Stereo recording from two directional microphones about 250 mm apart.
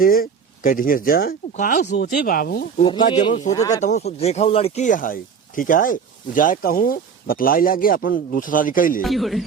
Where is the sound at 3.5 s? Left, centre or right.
Centre.